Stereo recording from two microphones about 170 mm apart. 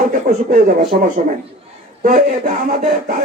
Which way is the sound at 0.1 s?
60° right (ahead or behind).